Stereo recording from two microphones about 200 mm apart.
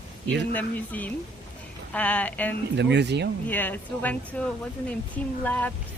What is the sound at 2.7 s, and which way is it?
Speech, 60° right (ahead or behind).